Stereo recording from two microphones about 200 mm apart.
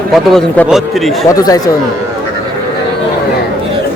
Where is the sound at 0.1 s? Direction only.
Centre (ahead or behind).